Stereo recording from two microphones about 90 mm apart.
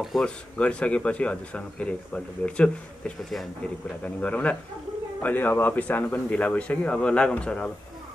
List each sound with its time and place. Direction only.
0.2 s a man's voice: 15° left (ahead or behind)